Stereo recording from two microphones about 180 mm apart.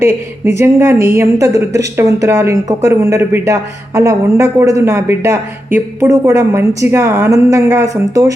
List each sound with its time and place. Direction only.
0.0 s a woman's voice: 15° right (ahead or behind)